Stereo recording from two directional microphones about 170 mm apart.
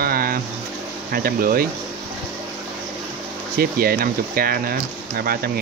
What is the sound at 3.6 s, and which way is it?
Speech, 60° right (ahead or behind).